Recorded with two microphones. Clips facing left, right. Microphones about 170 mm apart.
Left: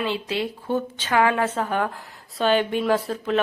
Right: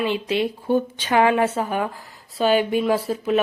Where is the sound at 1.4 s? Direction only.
10° right (ahead or behind).